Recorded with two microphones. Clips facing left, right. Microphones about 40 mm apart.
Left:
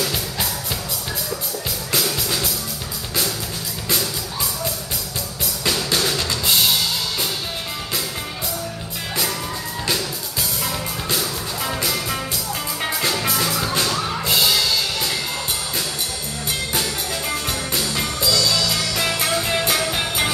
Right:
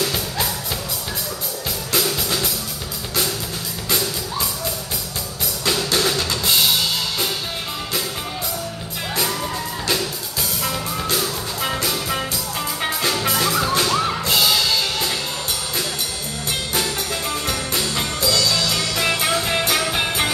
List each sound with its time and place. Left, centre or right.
2.0 s music: centre
6.0 s drum kit: centre
10.6 s music: centre
13.2 s music: centre
17.5 s music: centre